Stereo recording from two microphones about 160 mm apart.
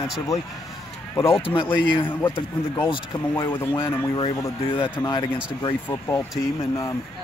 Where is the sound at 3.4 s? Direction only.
15° left (ahead or behind).